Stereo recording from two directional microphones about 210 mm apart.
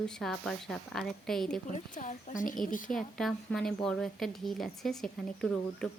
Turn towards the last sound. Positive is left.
turn(degrees=0)  # may be behind; listen again after turning